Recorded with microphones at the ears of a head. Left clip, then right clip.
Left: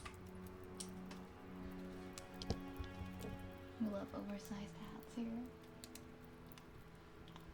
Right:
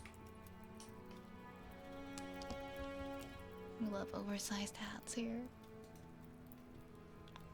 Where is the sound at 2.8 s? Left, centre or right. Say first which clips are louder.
Right 7 dB; right.